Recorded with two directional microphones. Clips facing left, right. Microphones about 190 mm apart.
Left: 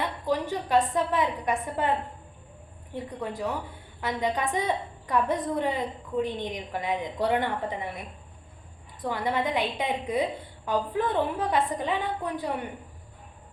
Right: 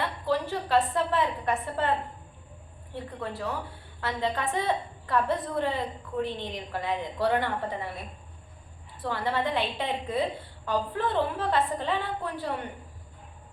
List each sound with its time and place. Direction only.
0.0 s a woman's voice: 15° left (ahead or behind)
2.9 s a woman's voice: 15° left (ahead or behind)
9.0 s a woman's voice: 15° left (ahead or behind)